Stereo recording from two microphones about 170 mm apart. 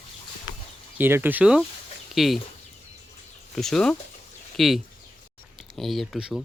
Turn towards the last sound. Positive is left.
turn(degrees=-5)  # may be behind; listen again after turning